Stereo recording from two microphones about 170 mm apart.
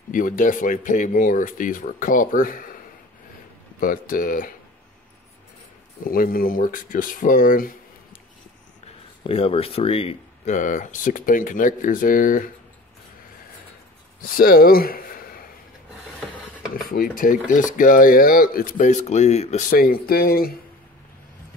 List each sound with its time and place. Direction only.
0.1 s speech: 50° left (ahead or behind)
3.8 s speech: 55° left (ahead or behind)
6.0 s speech: 60° left (ahead or behind)
9.2 s speech: 35° left (ahead or behind); by 12.4 s 55° left (ahead or behind)
14.2 s speech: 55° left (ahead or behind)
16.9 s speech: 55° left (ahead or behind)
19.7 s speech: 60° left (ahead or behind)